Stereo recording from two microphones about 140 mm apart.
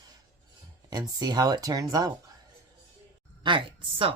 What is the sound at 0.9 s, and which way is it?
Speech, 30° right (ahead or behind).